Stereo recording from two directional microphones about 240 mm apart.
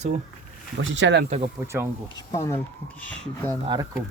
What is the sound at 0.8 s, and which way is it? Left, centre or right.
Speech, right.